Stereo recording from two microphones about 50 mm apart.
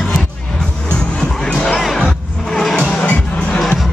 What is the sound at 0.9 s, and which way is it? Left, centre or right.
Music, centre.